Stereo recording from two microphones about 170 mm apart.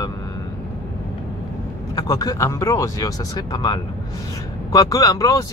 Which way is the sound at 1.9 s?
20° left (ahead or behind).